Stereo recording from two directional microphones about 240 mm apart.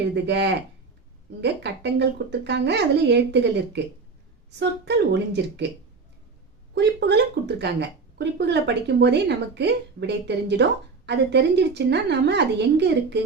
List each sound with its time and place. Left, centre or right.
0.1 s a woman's voice: right
6.7 s a woman's voice: right